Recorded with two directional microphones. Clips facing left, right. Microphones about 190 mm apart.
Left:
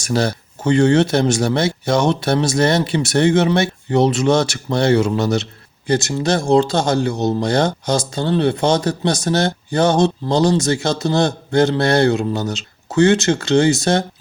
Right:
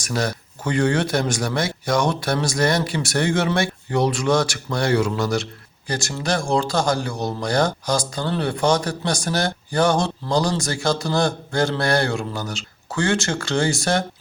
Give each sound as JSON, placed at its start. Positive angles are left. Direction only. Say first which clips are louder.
{"t": 0.0, "sound": "speech", "louder": "left 5 dB", "side_deg": 30}